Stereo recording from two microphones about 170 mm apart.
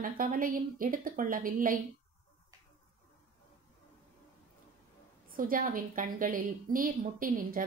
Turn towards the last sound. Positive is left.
turn(degrees=-55)  # may be behind; listen again after turning